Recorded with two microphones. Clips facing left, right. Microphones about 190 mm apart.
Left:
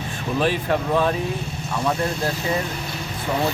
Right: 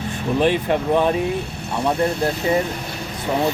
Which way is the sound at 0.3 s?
20° right (ahead or behind).